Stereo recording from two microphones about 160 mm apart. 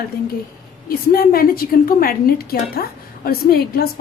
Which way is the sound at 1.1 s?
65° left (ahead or behind).